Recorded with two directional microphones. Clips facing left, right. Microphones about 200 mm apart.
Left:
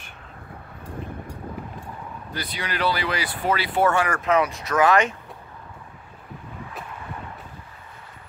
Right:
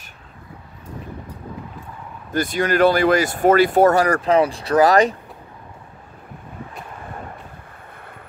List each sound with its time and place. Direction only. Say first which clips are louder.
2.3 s speech: right 12 dB; 45° right (ahead or behind)